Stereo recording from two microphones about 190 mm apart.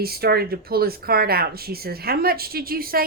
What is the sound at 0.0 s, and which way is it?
A woman's voice, 55° right (ahead or behind).